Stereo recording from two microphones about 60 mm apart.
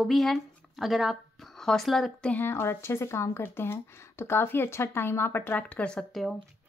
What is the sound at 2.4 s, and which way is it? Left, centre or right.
Speech, left.